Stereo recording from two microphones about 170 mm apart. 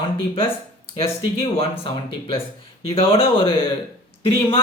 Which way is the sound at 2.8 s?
35° left (ahead or behind).